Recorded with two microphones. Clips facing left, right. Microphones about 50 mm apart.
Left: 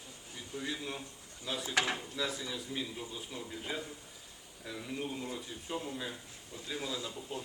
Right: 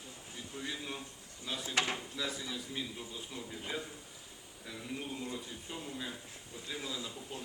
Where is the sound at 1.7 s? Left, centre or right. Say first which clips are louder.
Left 1 dB; left.